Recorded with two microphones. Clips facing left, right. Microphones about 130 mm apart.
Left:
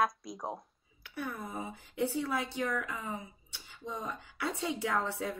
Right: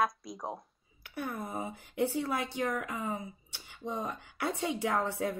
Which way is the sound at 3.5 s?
55° right (ahead or behind).